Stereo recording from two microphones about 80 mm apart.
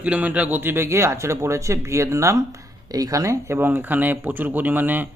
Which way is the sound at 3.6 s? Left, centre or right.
Right.